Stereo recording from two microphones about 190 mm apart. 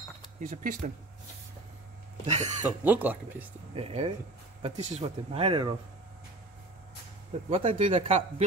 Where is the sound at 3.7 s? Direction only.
30° right (ahead or behind).